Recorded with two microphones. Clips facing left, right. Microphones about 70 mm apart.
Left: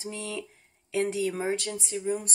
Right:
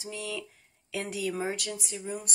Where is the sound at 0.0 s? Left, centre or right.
Left.